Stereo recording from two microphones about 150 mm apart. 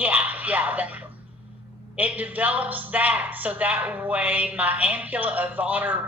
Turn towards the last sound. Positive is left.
turn(degrees=-10)  # may be behind; listen again after turning